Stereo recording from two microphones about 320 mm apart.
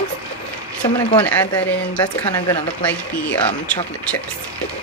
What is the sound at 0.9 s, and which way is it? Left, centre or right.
Speech, centre.